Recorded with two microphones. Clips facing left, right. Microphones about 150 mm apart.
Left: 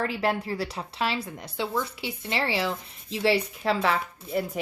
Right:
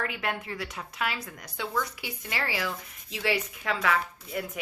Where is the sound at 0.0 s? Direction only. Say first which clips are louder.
Left 6 dB; 30° left (ahead or behind).